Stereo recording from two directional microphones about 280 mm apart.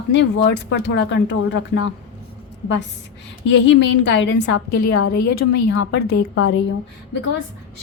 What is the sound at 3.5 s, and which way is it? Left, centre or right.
Speech, left.